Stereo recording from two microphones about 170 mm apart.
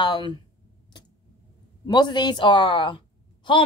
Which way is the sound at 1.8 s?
25° left (ahead or behind).